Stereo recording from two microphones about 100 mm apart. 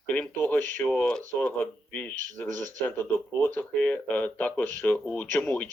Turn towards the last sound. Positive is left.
turn(degrees=20)  # may be behind; listen again after turning